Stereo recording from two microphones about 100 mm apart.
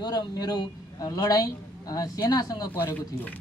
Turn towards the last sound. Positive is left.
turn(degrees=20)  # may be behind; listen again after turning